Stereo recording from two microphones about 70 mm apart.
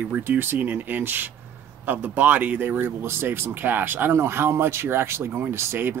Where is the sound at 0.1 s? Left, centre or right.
Right.